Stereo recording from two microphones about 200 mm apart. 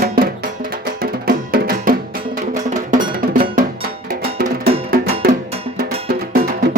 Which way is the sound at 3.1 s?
45° right (ahead or behind).